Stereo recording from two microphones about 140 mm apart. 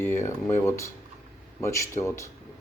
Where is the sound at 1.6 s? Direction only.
20° left (ahead or behind).